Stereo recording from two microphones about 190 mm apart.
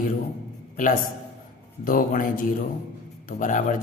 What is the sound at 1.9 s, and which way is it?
A man's voice, 45° left (ahead or behind).